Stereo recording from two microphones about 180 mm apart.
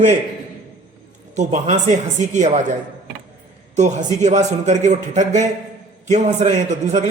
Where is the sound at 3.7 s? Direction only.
40° right (ahead or behind).